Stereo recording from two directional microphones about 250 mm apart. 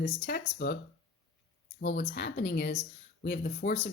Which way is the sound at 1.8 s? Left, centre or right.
Left.